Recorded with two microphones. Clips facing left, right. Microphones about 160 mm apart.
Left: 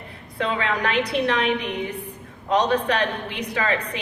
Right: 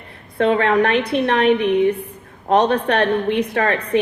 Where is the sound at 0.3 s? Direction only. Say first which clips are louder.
Right 9 dB; 50° right (ahead or behind).